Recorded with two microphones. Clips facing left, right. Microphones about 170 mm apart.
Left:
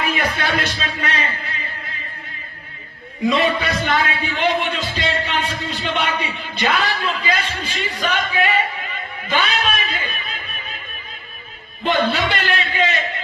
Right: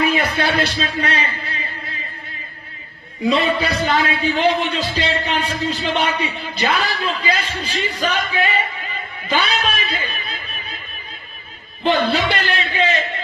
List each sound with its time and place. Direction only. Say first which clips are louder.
0.0 s music: right 4 dB; 35° right (ahead or behind)
3.2 s a man's voice: right 1 dB; 35° right (ahead or behind)
10.2 s music: even; 35° right (ahead or behind)
11.8 s a man's voice: right 1 dB; 35° right (ahead or behind)